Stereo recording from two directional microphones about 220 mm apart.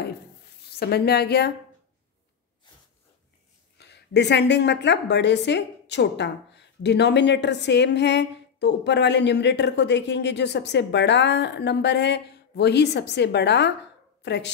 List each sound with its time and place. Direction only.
0.6 s a woman's voice: 45° left (ahead or behind)
3.7 s a woman's voice: 50° left (ahead or behind)